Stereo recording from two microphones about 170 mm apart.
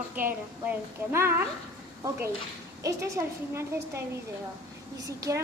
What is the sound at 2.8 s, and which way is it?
A woman's voice, 20° right (ahead or behind).